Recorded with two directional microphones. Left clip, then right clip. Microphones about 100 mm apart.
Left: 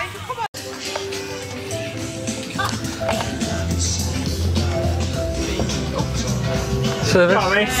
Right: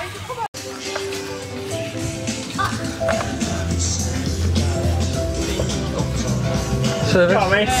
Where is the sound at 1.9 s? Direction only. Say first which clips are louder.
Right 1 dB; 25° right (ahead or behind).